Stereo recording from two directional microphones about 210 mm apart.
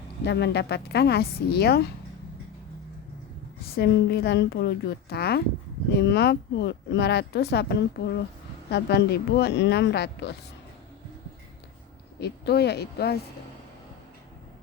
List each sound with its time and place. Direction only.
0.3 s speech: 55° left (ahead or behind)
3.8 s speech: 50° left (ahead or behind)
12.2 s speech: 50° left (ahead or behind)